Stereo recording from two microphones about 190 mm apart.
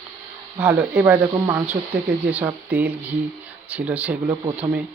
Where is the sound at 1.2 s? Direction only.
20° right (ahead or behind).